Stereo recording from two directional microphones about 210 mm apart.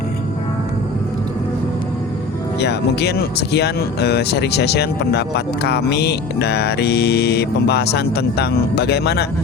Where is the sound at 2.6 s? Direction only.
50° left (ahead or behind).